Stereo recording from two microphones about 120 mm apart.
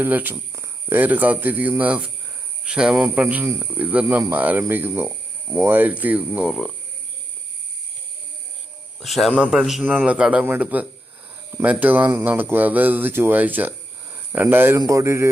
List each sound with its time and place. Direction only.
0.0 s speech: 15° right (ahead or behind)
9.0 s a man's voice: centre (ahead or behind); by 15.3 s 25° right (ahead or behind)